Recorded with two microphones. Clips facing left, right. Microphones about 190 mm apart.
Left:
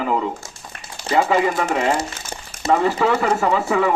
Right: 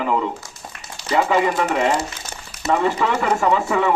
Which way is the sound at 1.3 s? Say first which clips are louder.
Even; 40° left (ahead or behind).